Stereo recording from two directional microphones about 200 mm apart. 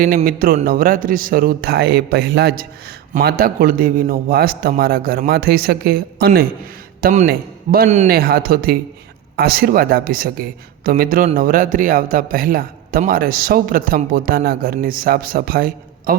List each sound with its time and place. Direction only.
0.3 s a man's voice: 45° right (ahead or behind)
7.0 s speech: 35° right (ahead or behind)
7.3 s a man's voice: 50° right (ahead or behind)